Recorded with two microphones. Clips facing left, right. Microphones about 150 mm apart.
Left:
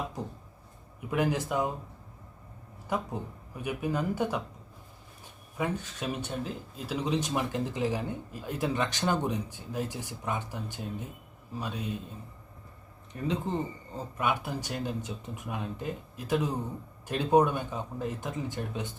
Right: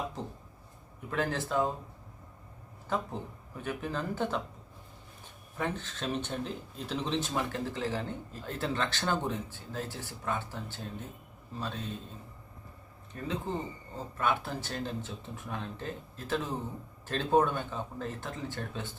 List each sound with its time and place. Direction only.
1.1 s speech: 15° left (ahead or behind)
2.9 s speech: 15° left (ahead or behind)
5.5 s speech: 10° left (ahead or behind)
13.1 s speech: 20° left (ahead or behind)